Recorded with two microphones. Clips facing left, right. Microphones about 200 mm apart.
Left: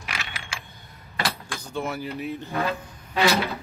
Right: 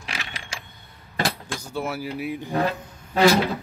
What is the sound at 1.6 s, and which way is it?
Speech, 5° right (ahead or behind).